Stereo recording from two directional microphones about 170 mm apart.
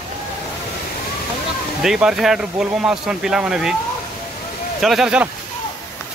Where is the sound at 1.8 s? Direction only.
5° right (ahead or behind).